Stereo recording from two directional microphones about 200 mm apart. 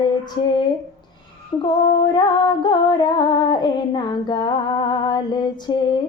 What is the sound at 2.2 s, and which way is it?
Female singing, 20° left (ahead or behind).